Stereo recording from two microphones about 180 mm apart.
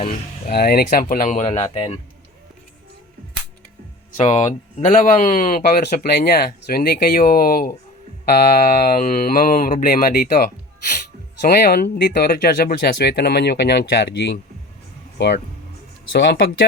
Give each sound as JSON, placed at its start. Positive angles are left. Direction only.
{"t": 0.0, "sound": "speech", "side_deg": 40}
{"t": 0.5, "sound": "speech", "side_deg": 60}
{"t": 4.2, "sound": "speech", "side_deg": 35}
{"t": 11.4, "sound": "speech", "side_deg": 60}
{"t": 16.1, "sound": "speech", "side_deg": 70}